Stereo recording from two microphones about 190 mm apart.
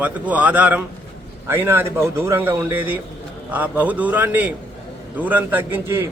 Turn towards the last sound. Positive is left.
turn(degrees=-10)  # may be behind; listen again after turning